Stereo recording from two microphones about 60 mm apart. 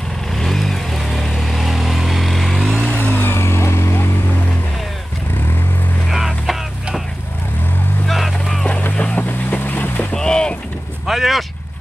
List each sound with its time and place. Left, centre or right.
0.4 s vehicle: centre
2.9 s vehicle: left
6.0 s music: centre
8.1 s vehicle: centre
8.6 s boat: left
10.1 s mechanisms: centre
11.1 s vehicle: centre